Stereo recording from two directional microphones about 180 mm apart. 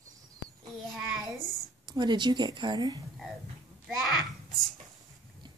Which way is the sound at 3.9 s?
Centre (ahead or behind).